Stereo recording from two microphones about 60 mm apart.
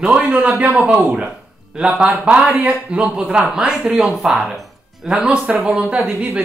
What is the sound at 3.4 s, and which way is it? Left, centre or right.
Speech, centre.